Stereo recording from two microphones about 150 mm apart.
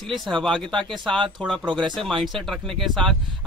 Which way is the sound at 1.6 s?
30° right (ahead or behind).